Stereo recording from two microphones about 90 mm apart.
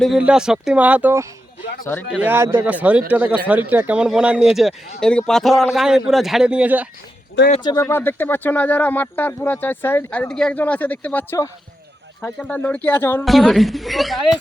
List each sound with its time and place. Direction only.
0.2 s speech: 10° right (ahead or behind)
0.8 s speech: 20° right (ahead or behind)
2.1 s speech: 20° right (ahead or behind)
2.6 s speech: 15° right (ahead or behind)
7.8 s speech: 25° left (ahead or behind)
13.2 s a woman's voice: centre (ahead or behind)